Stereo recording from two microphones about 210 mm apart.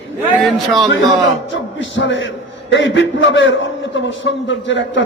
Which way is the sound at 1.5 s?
60° left (ahead or behind).